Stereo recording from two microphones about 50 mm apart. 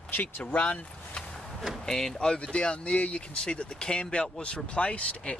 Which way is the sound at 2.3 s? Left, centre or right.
Left.